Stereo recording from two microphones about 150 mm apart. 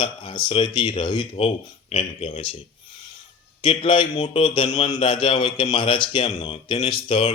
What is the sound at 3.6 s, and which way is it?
A man's voice, 35° left (ahead or behind).